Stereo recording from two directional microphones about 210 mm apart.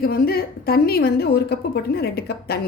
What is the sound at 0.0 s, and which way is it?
A woman's voice, 45° left (ahead or behind).